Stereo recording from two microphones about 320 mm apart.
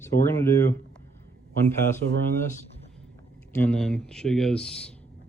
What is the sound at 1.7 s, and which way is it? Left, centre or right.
Speech, centre.